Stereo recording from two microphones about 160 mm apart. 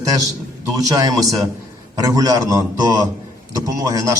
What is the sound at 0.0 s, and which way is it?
A man's voice, 20° right (ahead or behind).